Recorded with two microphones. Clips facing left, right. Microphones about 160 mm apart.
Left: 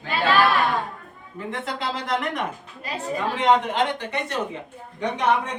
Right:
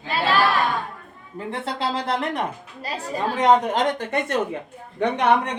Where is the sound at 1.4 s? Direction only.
30° right (ahead or behind); by 4.3 s 45° right (ahead or behind).